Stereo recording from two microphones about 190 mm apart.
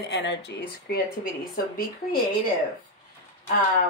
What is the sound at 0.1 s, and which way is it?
Speech, 65° left (ahead or behind).